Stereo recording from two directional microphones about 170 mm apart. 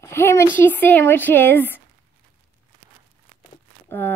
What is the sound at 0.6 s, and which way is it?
A woman's voice, 10° left (ahead or behind).